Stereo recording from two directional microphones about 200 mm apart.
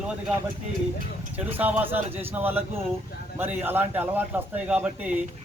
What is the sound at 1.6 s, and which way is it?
A man's voice, 10° right (ahead or behind).